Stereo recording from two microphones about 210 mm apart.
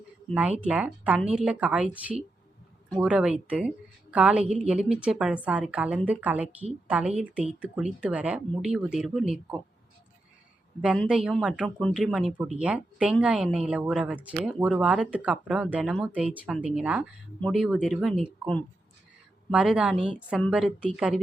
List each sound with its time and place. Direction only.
0.3 s speech: 5° right (ahead or behind)
10.8 s speech: 5° right (ahead or behind)